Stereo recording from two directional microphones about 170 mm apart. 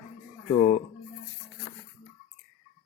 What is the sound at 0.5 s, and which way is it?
Speech, 40° left (ahead or behind).